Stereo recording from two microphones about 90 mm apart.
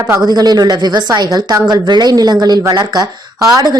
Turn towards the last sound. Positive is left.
turn(degrees=-45)  # may be behind; listen again after turning